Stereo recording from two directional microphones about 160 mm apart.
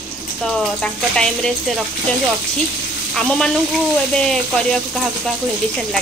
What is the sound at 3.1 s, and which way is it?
Speech, 5° left (ahead or behind).